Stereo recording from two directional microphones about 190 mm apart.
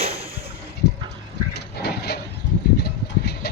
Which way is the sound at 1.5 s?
60° left (ahead or behind).